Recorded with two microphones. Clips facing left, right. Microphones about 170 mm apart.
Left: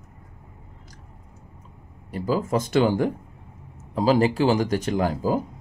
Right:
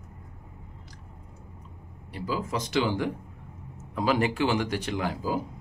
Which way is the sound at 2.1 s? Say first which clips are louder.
Left 7 dB; 45° left (ahead or behind).